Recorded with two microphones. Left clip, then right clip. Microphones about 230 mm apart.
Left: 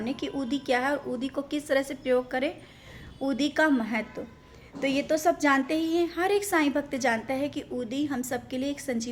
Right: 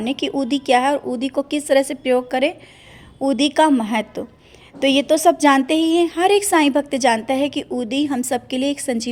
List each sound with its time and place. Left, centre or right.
0.2 s a woman's voice: right